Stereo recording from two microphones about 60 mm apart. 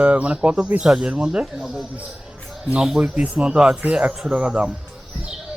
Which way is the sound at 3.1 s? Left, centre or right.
Right.